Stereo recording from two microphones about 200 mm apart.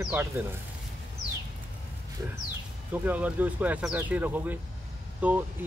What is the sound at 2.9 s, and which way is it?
Speech, 10° right (ahead or behind).